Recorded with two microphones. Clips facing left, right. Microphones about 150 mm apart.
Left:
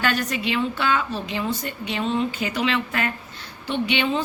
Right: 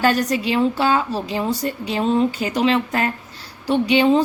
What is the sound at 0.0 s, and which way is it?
A woman's voice, 40° right (ahead or behind).